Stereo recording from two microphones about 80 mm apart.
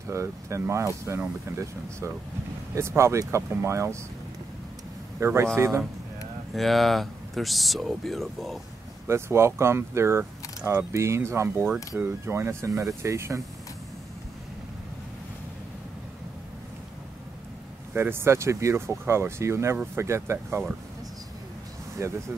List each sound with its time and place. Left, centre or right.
0.1 s speech: right
5.2 s speech: right
6.5 s speech: centre
9.0 s speech: right
17.9 s speech: right
22.0 s speech: right